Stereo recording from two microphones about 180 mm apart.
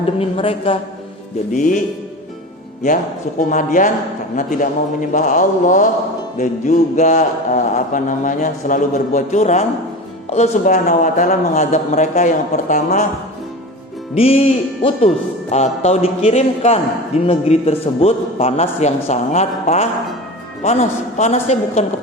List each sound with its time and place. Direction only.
0.2 s a man's voice: 30° left (ahead or behind)
1.5 s a man's voice: 45° left (ahead or behind)
2.8 s a man's voice: 45° left (ahead or behind)
14.2 s a man's voice: 35° left (ahead or behind)